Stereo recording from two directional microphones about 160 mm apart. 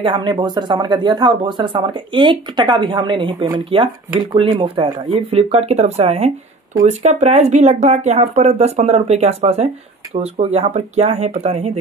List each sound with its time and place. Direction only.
0.0 s speech: 30° right (ahead or behind)